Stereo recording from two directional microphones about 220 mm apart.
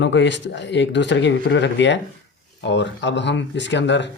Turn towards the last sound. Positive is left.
turn(degrees=55)  # may be behind; listen again after turning